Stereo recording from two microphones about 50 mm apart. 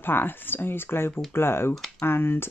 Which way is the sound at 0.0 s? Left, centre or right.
Left.